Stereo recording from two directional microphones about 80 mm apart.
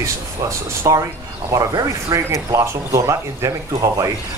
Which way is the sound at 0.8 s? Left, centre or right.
Right.